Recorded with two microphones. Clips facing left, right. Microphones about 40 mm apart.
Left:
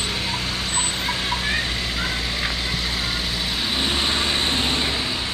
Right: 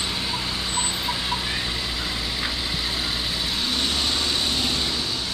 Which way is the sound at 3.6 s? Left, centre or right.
Centre.